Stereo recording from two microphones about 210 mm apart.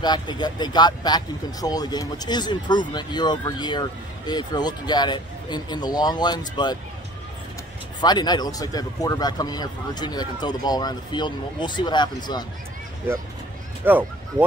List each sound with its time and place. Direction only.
0.0 s speech: 20° left (ahead or behind)
8.0 s speech: 20° left (ahead or behind)
13.9 s speech: 10° right (ahead or behind)